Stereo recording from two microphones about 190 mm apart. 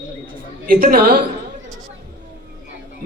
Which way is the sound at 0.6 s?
50° right (ahead or behind).